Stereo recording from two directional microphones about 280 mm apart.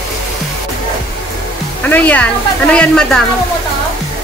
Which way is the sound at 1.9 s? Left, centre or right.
Centre.